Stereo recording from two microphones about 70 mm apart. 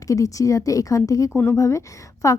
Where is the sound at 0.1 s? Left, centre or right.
Left.